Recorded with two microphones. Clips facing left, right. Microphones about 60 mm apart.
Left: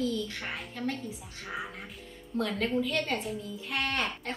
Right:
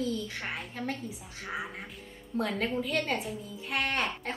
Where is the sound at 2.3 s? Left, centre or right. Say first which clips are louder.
Left 1 dB; centre.